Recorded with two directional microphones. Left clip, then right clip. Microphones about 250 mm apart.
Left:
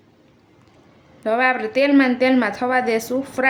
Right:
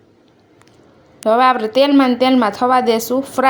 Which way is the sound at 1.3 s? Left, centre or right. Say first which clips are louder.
Right 6 dB; centre.